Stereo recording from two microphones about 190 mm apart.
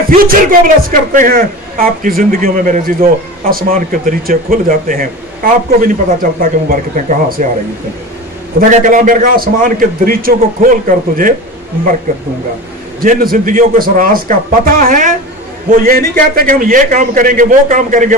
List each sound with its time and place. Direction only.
0.2 s a man's voice: 50° right (ahead or behind)
8.5 s a man's voice: 45° right (ahead or behind)
13.0 s a man's voice: 45° right (ahead or behind)